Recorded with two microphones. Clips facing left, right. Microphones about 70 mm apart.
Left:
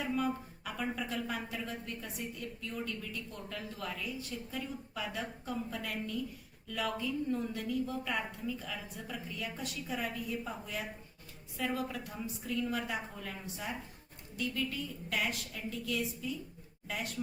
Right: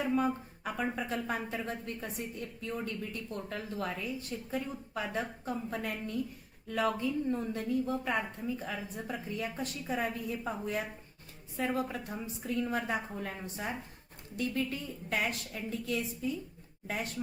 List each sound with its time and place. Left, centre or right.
0.0 s a man's voice: right